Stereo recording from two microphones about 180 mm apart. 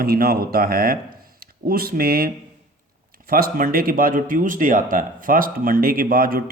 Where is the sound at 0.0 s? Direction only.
55° right (ahead or behind).